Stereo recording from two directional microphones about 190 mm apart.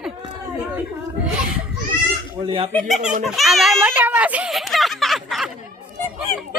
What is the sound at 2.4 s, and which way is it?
Speech, 25° right (ahead or behind).